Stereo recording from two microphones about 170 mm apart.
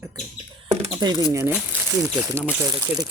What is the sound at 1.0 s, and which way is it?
Speech, 25° right (ahead or behind).